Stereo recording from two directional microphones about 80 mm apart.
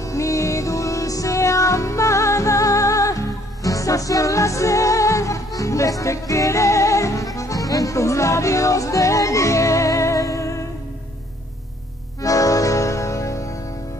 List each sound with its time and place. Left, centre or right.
0.0 s music: left
12.2 s music: left